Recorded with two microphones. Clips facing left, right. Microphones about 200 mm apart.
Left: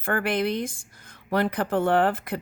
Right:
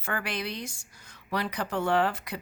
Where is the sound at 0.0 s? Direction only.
55° left (ahead or behind).